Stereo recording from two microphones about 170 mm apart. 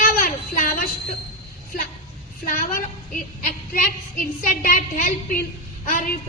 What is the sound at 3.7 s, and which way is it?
A woman's voice, 55° left (ahead or behind).